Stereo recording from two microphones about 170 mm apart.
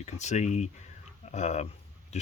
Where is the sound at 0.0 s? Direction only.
40° left (ahead or behind).